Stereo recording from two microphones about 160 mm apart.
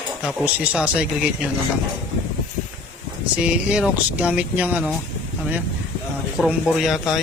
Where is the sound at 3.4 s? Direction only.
5° right (ahead or behind).